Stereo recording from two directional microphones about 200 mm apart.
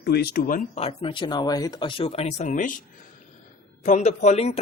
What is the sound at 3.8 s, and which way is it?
Speech, 35° left (ahead or behind).